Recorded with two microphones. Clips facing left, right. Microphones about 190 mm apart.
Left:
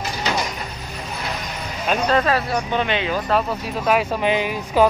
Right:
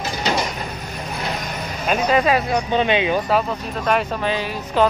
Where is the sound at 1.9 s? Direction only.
10° right (ahead or behind).